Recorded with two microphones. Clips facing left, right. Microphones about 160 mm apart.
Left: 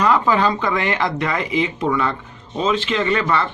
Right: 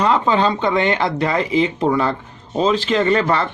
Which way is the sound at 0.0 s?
25° right (ahead or behind).